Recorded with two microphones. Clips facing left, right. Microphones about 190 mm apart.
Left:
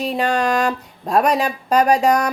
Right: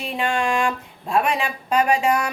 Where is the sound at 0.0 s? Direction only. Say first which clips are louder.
Left 4 dB; 40° left (ahead or behind).